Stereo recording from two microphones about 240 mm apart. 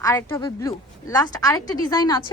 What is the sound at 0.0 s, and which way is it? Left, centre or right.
A woman's voice, centre.